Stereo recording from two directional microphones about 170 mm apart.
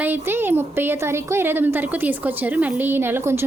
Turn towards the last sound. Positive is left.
turn(degrees=-15)  # may be behind; listen again after turning